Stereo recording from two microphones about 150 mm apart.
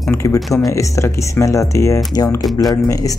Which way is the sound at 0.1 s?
20° left (ahead or behind).